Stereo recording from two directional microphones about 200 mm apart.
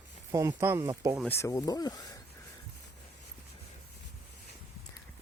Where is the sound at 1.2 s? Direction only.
15° left (ahead or behind).